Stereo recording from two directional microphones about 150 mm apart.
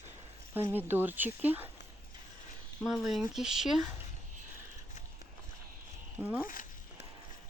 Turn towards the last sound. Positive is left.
turn(degrees=-10)  # may be behind; listen again after turning